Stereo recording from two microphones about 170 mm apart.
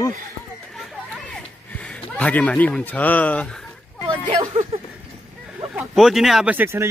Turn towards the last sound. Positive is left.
turn(degrees=-15)  # may be behind; listen again after turning